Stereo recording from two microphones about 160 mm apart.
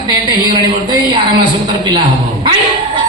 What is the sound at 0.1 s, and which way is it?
Speech, 25° right (ahead or behind).